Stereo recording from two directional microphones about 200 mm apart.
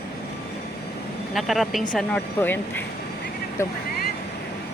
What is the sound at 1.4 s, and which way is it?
Speech, centre (ahead or behind).